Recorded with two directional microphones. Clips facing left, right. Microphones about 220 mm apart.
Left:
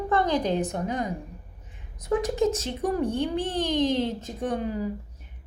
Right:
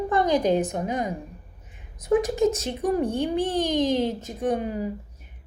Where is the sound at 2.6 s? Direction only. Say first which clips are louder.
Right 2 dB; 10° right (ahead or behind).